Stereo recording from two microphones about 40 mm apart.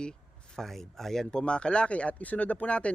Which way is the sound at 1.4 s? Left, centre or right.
Left.